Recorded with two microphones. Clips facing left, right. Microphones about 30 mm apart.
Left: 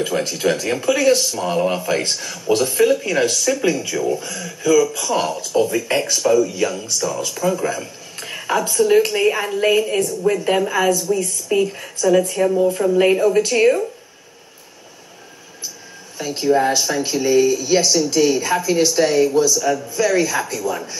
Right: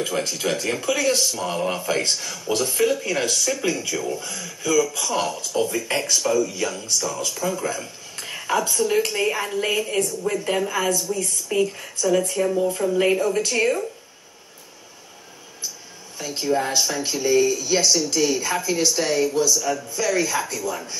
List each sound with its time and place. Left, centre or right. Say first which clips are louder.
0.0 s speech: left 5 dB; centre
10.2 s a woman's voice: left 6 dB; centre
10.7 s a woman's voice: left 6 dB; centre
16.2 s speech: left 6 dB; centre